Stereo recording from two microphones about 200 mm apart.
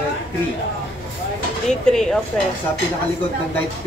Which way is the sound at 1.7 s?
5° left (ahead or behind).